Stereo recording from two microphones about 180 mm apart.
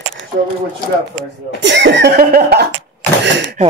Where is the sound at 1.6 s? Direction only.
80° right; by 2.7 s 60° right (ahead or behind).